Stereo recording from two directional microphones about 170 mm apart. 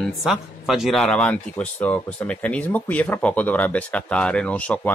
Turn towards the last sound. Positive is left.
turn(degrees=10)  # may be behind; listen again after turning